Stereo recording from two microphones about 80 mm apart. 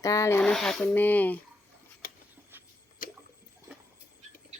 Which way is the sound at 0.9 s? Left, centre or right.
Left.